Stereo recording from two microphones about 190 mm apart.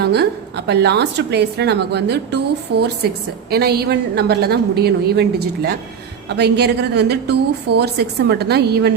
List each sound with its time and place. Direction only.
0.0 s a woman's voice: 60° right (ahead or behind)
6.2 s a woman's voice: 60° right (ahead or behind)